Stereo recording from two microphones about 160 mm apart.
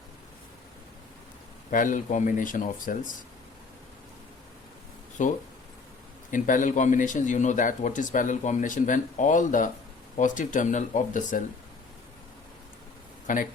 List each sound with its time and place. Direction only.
1.7 s speech: 55° left (ahead or behind)
5.2 s speech: 50° left (ahead or behind)
13.2 s speech: 55° left (ahead or behind)